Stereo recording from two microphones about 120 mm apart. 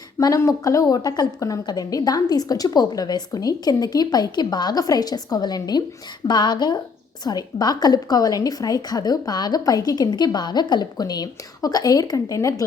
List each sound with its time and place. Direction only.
0.2 s a woman's voice: 30° left (ahead or behind)